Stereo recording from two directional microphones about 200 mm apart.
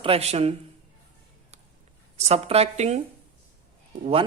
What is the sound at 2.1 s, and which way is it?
Speech, 30° right (ahead or behind).